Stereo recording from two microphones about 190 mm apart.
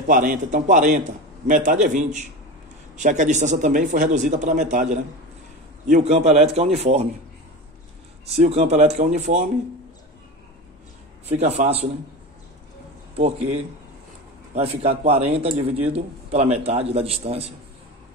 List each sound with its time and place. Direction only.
0.0 s a man's voice: 45° right (ahead or behind)
8.4 s a man's voice: 35° right (ahead or behind)
11.2 s a man's voice: 35° right (ahead or behind)
14.5 s a man's voice: 35° right (ahead or behind)